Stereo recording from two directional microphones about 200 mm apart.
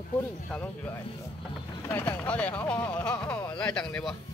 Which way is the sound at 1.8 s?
10° left (ahead or behind).